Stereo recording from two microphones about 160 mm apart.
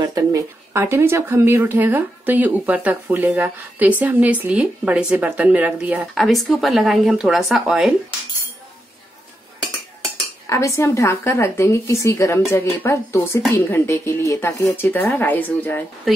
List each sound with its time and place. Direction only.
0.0 s speech: 20° right (ahead or behind); by 7.9 s 5° right (ahead or behind)
10.4 s a woman's voice: 20° left (ahead or behind)